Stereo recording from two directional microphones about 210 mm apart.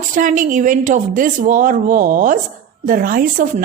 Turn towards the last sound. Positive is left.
turn(degrees=-40)  # may be behind; listen again after turning